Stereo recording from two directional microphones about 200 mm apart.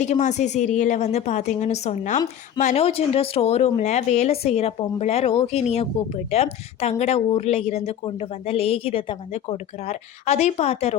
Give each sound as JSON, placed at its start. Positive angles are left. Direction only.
{"t": 0.0, "sound": "speech", "side_deg": 35}